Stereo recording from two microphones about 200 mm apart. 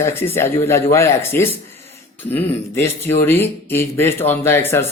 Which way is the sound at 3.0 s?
10° left (ahead or behind).